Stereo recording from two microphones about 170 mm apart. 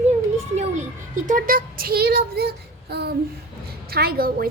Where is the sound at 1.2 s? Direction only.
55° right (ahead or behind).